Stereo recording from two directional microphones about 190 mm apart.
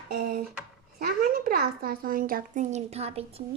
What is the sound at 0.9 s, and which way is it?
A woman's voice, 50° right (ahead or behind).